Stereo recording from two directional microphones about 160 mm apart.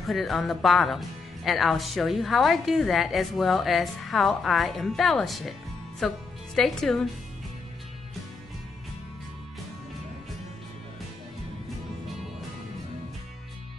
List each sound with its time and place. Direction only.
0.0 s a woman's voice: centre (ahead or behind)